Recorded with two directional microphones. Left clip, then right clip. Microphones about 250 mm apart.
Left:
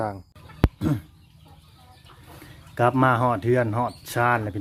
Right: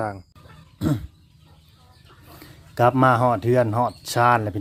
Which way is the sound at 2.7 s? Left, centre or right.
Centre.